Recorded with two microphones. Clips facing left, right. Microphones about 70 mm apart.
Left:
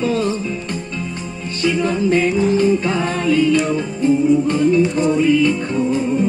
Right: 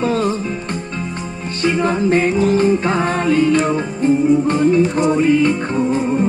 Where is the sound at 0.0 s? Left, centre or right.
Right.